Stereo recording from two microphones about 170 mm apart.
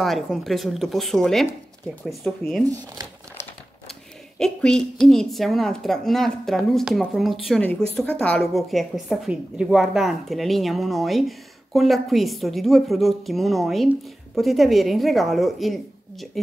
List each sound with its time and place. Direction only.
0.0 s a woman's voice: centre (ahead or behind)
2.6 s speech: 20° right (ahead or behind)
4.4 s a woman's voice: 5° left (ahead or behind)